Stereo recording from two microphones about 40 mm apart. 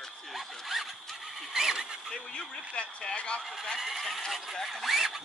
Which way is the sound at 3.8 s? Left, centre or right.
Centre.